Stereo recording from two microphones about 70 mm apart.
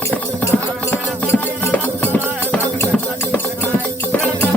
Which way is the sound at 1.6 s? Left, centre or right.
Left.